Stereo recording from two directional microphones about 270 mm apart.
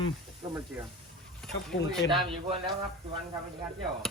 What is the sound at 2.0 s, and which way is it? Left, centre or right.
Speech, centre.